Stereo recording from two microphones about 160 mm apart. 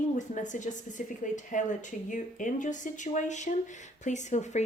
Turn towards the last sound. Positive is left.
turn(degrees=50)  # may be behind; listen again after turning